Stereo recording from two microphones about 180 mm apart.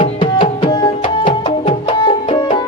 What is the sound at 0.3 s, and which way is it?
Tabla, 30° left (ahead or behind).